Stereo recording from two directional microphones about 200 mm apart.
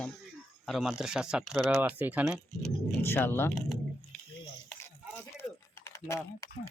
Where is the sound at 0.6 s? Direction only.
Centre (ahead or behind).